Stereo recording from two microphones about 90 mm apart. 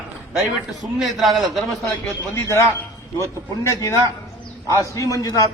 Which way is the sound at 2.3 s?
30° left (ahead or behind).